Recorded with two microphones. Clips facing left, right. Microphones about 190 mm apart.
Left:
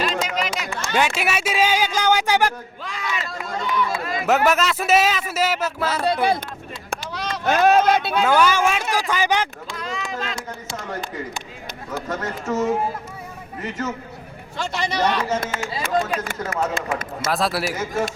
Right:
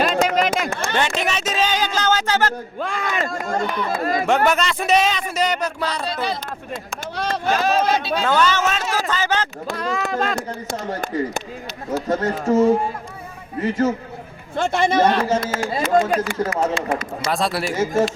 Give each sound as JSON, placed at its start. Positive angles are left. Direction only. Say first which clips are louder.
{"t": 0.0, "sound": "a sound", "louder": "right 6 dB", "side_deg": -50}
{"t": 0.9, "sound": "music", "louder": "left 2 dB", "side_deg": 10}
{"t": 2.8, "sound": "speech", "louder": "right 5 dB", "side_deg": -50}
{"t": 3.9, "sound": "speech", "louder": "right 5 dB", "side_deg": -40}
{"t": 4.3, "sound": "speech", "louder": "left 2 dB", "side_deg": 5}
{"t": 6.0, "sound": "speech", "louder": "left 5 dB", "side_deg": 60}
{"t": 7.4, "sound": "speech", "louder": "left 4 dB", "side_deg": 55}
{"t": 8.2, "sound": "music", "louder": "left 2 dB", "side_deg": 10}
{"t": 9.6, "sound": "speech", "louder": "right 6 dB", "side_deg": -50}
{"t": 12.0, "sound": "speech", "louder": "right 7 dB", "side_deg": -30}
{"t": 14.7, "sound": "speech", "louder": "right 5 dB", "side_deg": -50}
{"t": 15.4, "sound": "speech", "louder": "right 4 dB", "side_deg": -35}
{"t": 15.7, "sound": "speech", "louder": "right 6 dB", "side_deg": -45}
{"t": 17.2, "sound": "speech", "louder": "even", "side_deg": 0}